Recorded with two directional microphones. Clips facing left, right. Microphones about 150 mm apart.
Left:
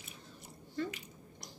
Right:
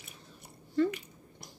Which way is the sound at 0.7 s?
60° right (ahead or behind).